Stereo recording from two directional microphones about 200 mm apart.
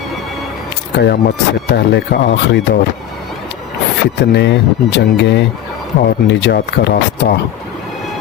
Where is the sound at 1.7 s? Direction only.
55° left (ahead or behind).